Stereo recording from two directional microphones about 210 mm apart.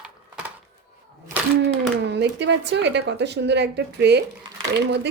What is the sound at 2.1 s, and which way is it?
Speech, 55° right (ahead or behind).